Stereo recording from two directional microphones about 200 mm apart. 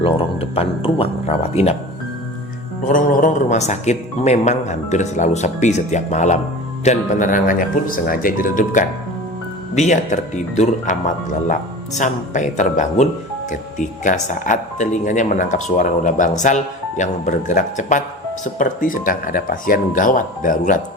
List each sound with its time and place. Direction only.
0.0 s speech: 30° left (ahead or behind)
2.8 s speech: 40° left (ahead or behind)